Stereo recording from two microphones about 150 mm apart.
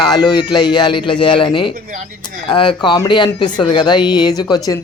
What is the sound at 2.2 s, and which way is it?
Speech, 30° left (ahead or behind).